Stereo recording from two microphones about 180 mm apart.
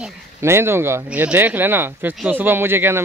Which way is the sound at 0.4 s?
15° right (ahead or behind).